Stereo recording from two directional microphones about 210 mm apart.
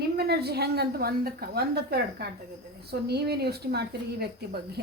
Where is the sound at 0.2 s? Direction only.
50° right (ahead or behind).